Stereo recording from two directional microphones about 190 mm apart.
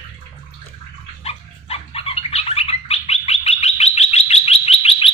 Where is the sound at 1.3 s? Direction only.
30° left (ahead or behind).